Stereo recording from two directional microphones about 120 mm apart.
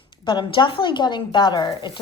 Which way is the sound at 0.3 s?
45° left (ahead or behind).